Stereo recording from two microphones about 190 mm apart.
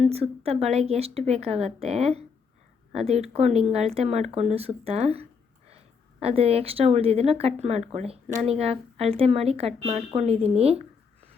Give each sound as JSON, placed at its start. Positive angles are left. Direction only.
{"t": 0.1, "sound": "speech", "side_deg": -30}